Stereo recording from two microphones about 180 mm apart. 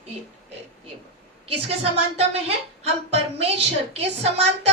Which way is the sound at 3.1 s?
35° right (ahead or behind).